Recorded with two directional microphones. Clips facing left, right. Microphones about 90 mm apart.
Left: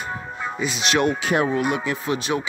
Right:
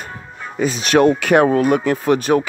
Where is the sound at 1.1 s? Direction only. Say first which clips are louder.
Right 8 dB; 60° right (ahead or behind).